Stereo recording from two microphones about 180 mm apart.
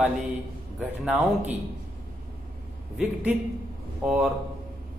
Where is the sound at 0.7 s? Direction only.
5° right (ahead or behind).